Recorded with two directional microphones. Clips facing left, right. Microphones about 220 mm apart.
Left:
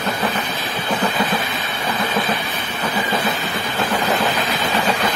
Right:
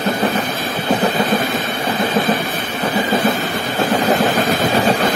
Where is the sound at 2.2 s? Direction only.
50° right (ahead or behind).